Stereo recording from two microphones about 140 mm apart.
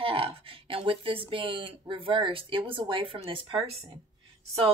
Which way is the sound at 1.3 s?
40° right (ahead or behind).